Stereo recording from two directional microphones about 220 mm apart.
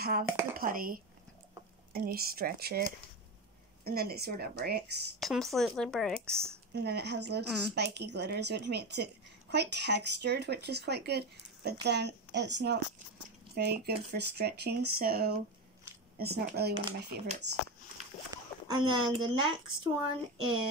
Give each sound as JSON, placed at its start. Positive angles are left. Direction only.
{"t": 0.2, "sound": "speech", "side_deg": -10}
{"t": 0.6, "sound": "speech", "side_deg": -40}
{"t": 3.8, "sound": "speech", "side_deg": -45}
{"t": 5.2, "sound": "a woman's voice", "side_deg": 0}
{"t": 6.7, "sound": "speech", "side_deg": -45}
{"t": 18.3, "sound": "a sound", "side_deg": -20}
{"t": 19.3, "sound": "speech", "side_deg": -25}